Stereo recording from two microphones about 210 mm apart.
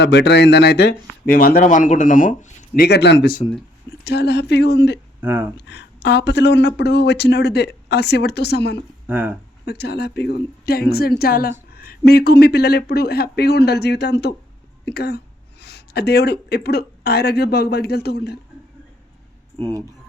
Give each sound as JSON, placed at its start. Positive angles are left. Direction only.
{"t": 0.0, "sound": "speech", "side_deg": 55}
{"t": 5.2, "sound": "speech", "side_deg": -10}
{"t": 5.5, "sound": "speech", "side_deg": 55}
{"t": 9.0, "sound": "speech", "side_deg": -10}
{"t": 9.6, "sound": "speech", "side_deg": 50}
{"t": 19.5, "sound": "speech", "side_deg": -15}